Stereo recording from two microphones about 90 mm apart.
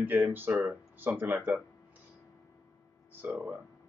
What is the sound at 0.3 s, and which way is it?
Speech, 20° right (ahead or behind).